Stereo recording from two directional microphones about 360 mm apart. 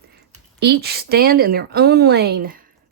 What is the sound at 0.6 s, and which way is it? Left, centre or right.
Speech, right.